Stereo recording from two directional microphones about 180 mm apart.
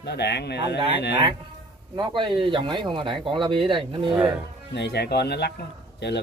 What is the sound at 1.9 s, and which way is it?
Speech, 25° right (ahead or behind).